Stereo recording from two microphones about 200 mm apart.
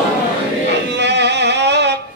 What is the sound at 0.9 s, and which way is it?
Music, 60° right (ahead or behind).